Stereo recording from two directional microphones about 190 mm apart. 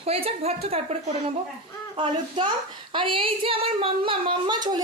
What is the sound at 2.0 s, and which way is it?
A woman's voice, 25° right (ahead or behind).